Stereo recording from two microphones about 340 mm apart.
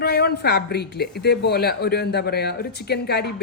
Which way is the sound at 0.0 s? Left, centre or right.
Left.